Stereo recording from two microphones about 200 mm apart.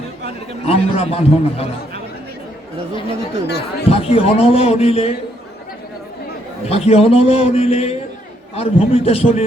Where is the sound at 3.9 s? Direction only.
30° left (ahead or behind).